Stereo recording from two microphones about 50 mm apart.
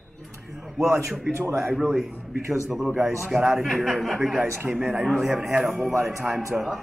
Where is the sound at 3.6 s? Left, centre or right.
Centre.